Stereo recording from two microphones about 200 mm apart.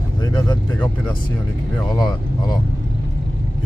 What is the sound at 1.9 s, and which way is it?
Speech, 20° left (ahead or behind).